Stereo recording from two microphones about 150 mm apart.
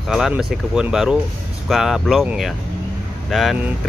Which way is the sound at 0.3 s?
5° right (ahead or behind).